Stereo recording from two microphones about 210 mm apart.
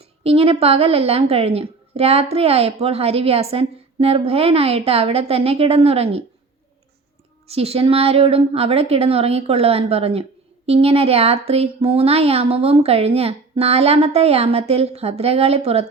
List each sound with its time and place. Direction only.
0.2 s speech: 25° right (ahead or behind)
7.4 s speech: 30° right (ahead or behind)